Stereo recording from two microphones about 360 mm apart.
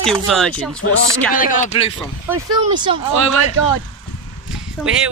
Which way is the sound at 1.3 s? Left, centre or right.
Left.